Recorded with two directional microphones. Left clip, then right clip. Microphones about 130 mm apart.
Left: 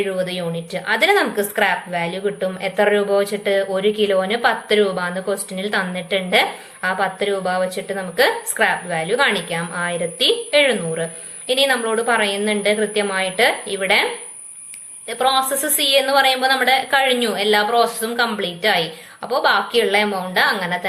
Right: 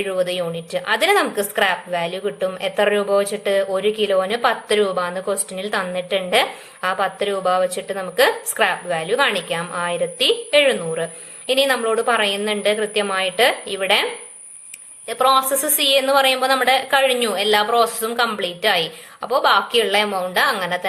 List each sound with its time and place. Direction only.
0.0 s a woman's voice: 50° right (ahead or behind)